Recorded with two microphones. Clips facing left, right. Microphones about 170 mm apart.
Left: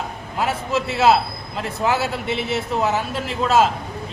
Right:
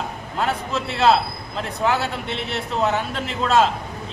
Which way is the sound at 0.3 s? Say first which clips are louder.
Left 2 dB; 5° left (ahead or behind).